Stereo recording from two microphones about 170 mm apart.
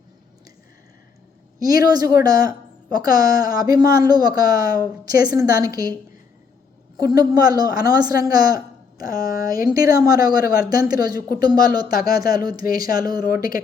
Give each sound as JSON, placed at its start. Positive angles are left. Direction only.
{"t": 1.5, "sound": "speech", "side_deg": -20}
{"t": 7.0, "sound": "speech", "side_deg": -20}
{"t": 9.0, "sound": "speech", "side_deg": 55}
{"t": 9.6, "sound": "speech", "side_deg": -20}
{"t": 13.2, "sound": "speech", "side_deg": 60}